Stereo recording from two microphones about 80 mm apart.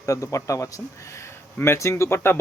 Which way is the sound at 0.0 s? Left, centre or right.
Left.